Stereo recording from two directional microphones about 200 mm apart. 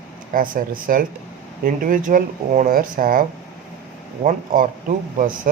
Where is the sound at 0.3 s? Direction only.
45° right (ahead or behind).